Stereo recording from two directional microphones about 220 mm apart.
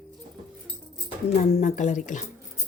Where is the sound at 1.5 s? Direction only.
35° left (ahead or behind).